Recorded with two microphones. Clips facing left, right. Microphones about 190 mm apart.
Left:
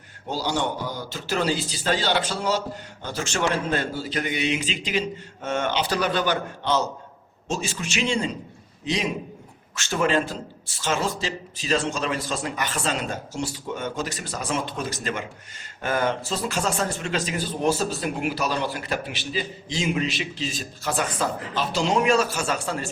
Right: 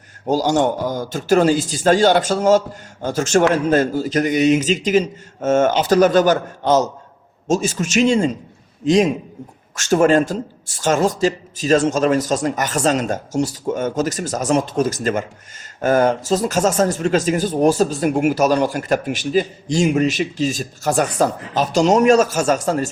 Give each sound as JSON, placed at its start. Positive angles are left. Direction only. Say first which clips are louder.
{"t": 0.3, "sound": "speech", "louder": "right 9 dB", "side_deg": -45}
{"t": 9.7, "sound": "speech", "louder": "right 9 dB", "side_deg": -45}